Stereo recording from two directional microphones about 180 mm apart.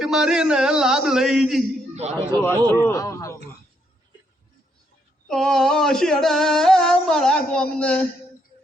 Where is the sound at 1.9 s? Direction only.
40° right (ahead or behind).